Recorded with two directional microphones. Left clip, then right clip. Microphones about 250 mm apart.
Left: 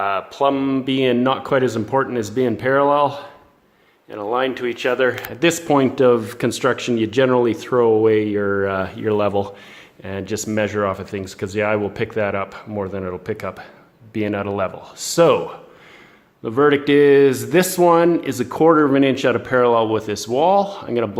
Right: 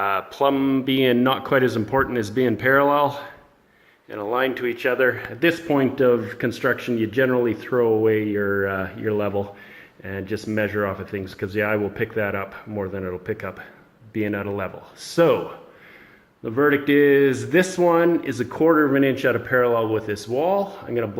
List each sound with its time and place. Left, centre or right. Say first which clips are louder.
0.0 s speech: left 2 dB; left
16.4 s speech: left 4 dB; left